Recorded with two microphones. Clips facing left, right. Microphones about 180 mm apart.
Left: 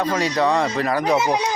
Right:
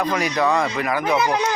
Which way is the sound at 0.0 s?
30° left (ahead or behind).